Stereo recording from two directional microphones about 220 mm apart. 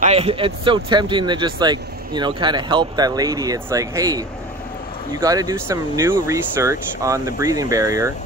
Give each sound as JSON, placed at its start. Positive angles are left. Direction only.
{"t": 0.0, "sound": "speech", "side_deg": -30}
{"t": 5.2, "sound": "speech", "side_deg": -15}